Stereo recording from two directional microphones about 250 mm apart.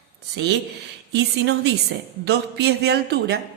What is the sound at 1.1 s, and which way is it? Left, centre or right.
A woman's voice, right.